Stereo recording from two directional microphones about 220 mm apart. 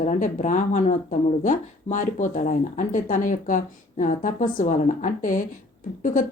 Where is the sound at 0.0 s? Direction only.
35° left (ahead or behind).